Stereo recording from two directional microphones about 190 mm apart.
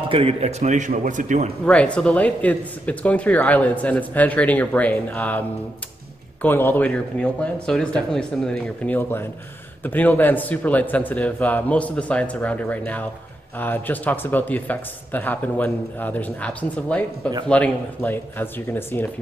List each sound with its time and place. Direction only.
0.1 s a man's voice: 30° right (ahead or behind)
1.7 s speech: 5° left (ahead or behind)
6.4 s speech: 10° left (ahead or behind)